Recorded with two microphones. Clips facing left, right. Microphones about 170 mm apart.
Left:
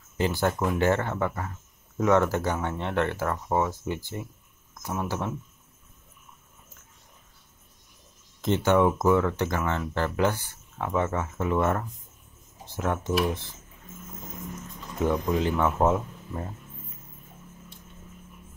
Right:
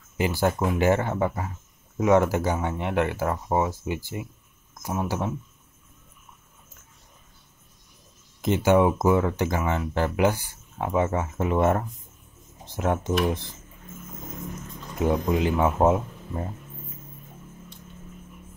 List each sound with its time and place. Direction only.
0.2 s speech: 10° right (ahead or behind)
8.4 s speech: 10° right (ahead or behind)
15.0 s speech: 15° right (ahead or behind)